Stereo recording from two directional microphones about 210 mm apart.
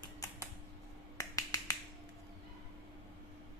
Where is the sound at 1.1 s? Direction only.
15° left (ahead or behind).